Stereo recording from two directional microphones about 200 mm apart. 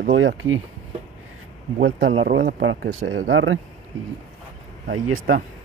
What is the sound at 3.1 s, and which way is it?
Speech, 75° right (ahead or behind).